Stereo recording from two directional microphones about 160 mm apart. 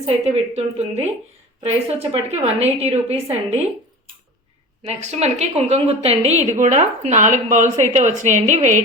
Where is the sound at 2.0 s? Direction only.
40° right (ahead or behind).